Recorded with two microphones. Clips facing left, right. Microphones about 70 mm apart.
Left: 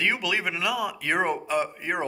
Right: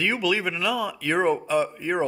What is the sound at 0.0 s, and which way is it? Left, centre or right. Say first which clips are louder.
Speech: right 2 dB; centre.